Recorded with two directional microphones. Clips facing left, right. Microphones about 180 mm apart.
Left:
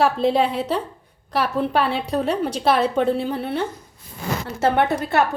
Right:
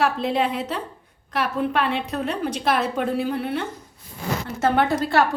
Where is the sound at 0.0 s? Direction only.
30° left (ahead or behind).